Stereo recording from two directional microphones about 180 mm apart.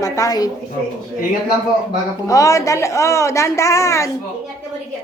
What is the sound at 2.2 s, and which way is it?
A woman's voice, 20° left (ahead or behind).